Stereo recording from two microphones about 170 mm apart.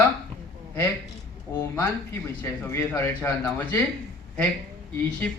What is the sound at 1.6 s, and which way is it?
Speech, 15° left (ahead or behind).